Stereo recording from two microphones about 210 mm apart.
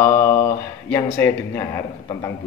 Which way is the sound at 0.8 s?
10° left (ahead or behind).